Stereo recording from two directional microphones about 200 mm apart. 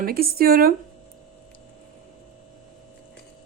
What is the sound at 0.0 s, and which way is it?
Speech, 50° right (ahead or behind).